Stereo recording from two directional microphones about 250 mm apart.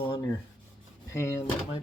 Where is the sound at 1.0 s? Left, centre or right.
Centre.